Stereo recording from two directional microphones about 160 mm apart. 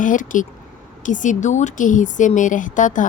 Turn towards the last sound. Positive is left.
turn(degrees=55)  # may be behind; listen again after turning